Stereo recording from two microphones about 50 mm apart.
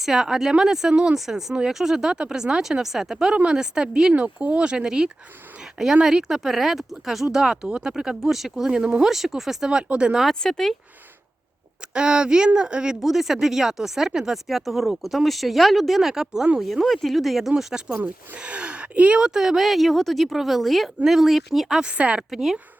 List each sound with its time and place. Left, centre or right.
0.0 s speech: centre
1.1 s speech: centre
4.1 s speech: right; by 7.3 s centre
7.5 s speech: centre
10.4 s speech: centre
11.9 s speech: centre
13.0 s speech: centre
17.8 s speech: right; by 21.8 s centre
21.8 s speech: right
22.3 s speech: centre